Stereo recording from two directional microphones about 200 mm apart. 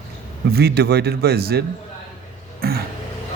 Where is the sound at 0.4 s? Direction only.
50° right (ahead or behind).